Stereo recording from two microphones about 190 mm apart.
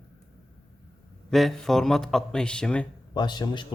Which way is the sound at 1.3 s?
Centre (ahead or behind).